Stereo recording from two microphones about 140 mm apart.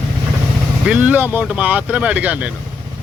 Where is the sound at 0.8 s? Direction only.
10° right (ahead or behind).